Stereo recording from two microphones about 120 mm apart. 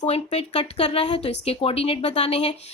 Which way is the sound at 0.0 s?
65° left (ahead or behind).